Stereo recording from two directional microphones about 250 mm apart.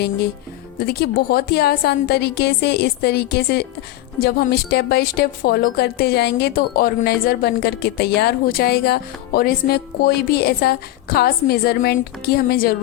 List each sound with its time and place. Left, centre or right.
0.9 s a woman's voice: left